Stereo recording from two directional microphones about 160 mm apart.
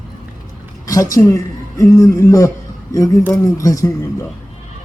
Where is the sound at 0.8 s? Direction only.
20° left (ahead or behind).